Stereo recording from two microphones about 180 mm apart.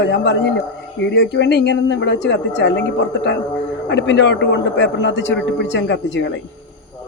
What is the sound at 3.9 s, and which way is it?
A man's voice, 75° left (ahead or behind).